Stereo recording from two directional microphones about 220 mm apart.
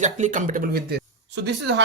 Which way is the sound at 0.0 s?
35° right (ahead or behind).